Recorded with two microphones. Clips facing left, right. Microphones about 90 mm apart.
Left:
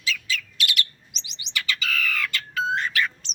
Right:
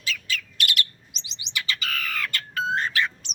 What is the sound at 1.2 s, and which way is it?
Bird, 20° right (ahead or behind).